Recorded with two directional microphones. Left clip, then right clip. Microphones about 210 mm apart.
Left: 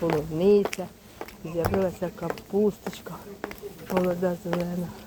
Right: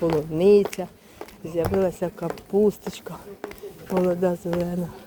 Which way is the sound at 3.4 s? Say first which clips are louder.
Left 2 dB; 15° left (ahead or behind).